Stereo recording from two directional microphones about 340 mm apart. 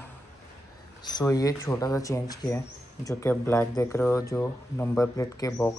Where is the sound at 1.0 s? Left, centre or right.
Centre.